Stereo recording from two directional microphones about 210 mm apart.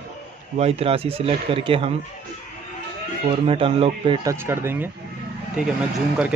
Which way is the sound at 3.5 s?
25° right (ahead or behind).